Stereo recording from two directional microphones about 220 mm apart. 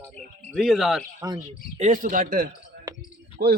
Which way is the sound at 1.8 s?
35° right (ahead or behind).